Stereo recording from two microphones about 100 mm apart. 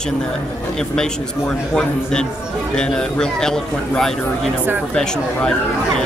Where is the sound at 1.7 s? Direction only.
5° left (ahead or behind).